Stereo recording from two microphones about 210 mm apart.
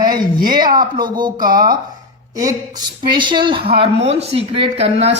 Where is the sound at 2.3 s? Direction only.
15° right (ahead or behind).